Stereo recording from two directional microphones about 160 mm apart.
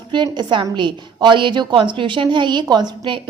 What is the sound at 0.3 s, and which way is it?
A woman's voice, 30° right (ahead or behind).